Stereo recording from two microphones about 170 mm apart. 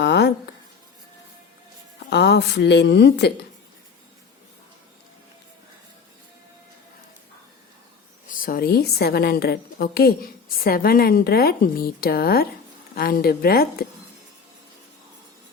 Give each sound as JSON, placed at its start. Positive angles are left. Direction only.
{"t": 0.0, "sound": "a sound", "side_deg": 85}
{"t": 2.0, "sound": "a woman's voice", "side_deg": 75}
{"t": 8.3, "sound": "a woman's voice", "side_deg": 55}